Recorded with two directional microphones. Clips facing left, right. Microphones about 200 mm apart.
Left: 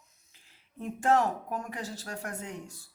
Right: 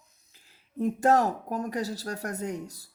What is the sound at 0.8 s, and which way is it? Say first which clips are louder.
A woman's voice: right 4 dB; 40° right (ahead or behind).